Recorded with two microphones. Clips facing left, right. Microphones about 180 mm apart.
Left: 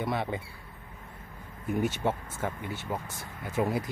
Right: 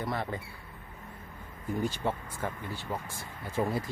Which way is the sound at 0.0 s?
20° left (ahead or behind).